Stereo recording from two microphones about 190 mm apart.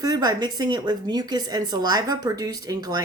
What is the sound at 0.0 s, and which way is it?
A woman's voice, 20° right (ahead or behind).